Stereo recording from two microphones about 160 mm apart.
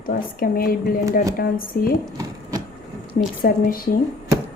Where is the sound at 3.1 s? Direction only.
65° left (ahead or behind).